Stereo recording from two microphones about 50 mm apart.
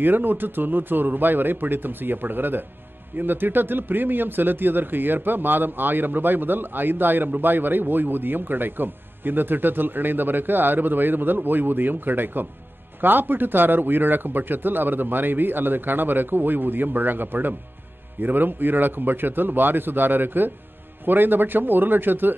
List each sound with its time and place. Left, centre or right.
0.0 s a man's voice: right